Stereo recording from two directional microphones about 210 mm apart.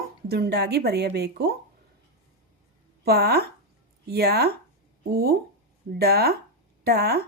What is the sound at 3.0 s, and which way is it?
Speech, 50° right (ahead or behind).